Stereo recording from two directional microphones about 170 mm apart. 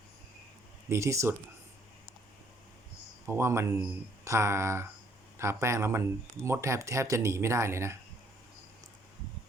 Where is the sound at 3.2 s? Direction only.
15° right (ahead or behind).